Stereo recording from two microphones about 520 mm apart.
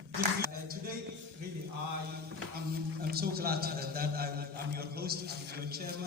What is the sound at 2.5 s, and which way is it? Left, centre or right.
A man's voice, centre.